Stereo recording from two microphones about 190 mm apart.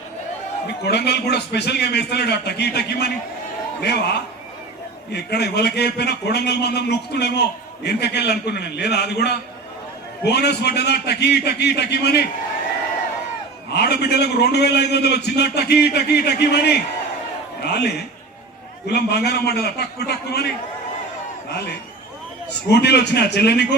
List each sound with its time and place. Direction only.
0.9 s a man's voice: 60° left (ahead or behind)
5.1 s a man's voice: 60° left (ahead or behind)
13.7 s a man's voice: 60° left (ahead or behind)
22.7 s a man's voice: 60° left (ahead or behind)